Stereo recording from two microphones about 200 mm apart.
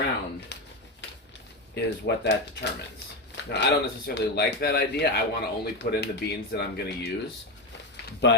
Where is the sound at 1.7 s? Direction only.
55° left (ahead or behind).